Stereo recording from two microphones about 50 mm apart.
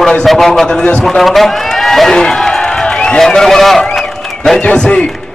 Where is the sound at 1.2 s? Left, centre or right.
Centre.